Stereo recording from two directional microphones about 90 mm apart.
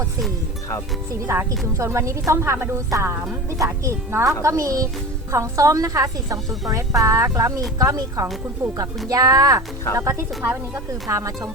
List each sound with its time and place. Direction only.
1.3 s a woman's voice: 30° right (ahead or behind)